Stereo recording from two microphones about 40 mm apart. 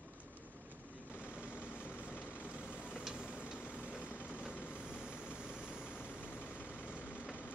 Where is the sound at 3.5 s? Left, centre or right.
Left.